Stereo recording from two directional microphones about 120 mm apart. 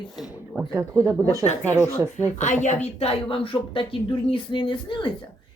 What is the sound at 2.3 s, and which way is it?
Speech, 85° left.